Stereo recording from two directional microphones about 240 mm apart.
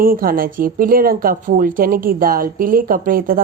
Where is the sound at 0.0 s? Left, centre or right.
Right.